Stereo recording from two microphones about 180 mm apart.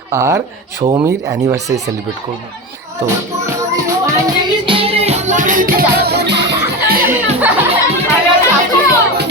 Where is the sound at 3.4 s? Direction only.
15° right (ahead or behind); by 6.6 s 70° right (ahead or behind).